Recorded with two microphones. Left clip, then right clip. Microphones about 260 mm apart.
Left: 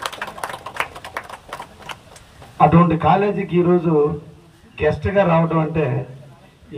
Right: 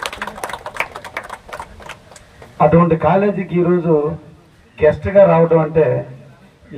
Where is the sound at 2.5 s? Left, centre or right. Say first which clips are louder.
Right 2 dB; centre.